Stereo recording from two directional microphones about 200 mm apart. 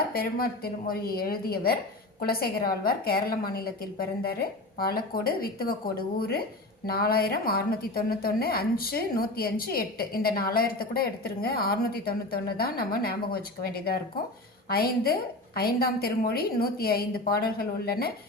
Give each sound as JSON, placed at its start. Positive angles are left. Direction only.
{"t": 0.1, "sound": "a woman's voice", "side_deg": 50}